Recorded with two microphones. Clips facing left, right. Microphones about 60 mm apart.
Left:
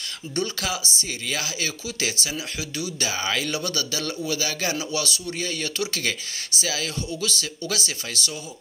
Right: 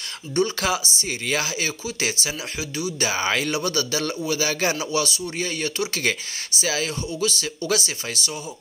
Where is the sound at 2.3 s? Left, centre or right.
Centre.